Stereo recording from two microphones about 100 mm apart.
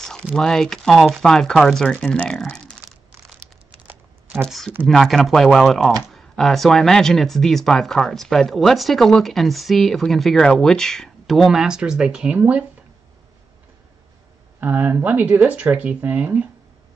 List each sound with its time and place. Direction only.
0.0 s a sound: 5° left (ahead or behind)
0.4 s speech: 5° left (ahead or behind)
4.5 s speech: centre (ahead or behind)
14.6 s speech: 15° right (ahead or behind)